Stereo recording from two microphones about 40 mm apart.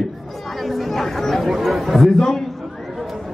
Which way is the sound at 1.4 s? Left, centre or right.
Centre.